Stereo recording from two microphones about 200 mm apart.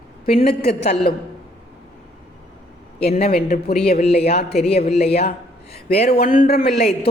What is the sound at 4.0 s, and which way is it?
Speech, 35° left (ahead or behind).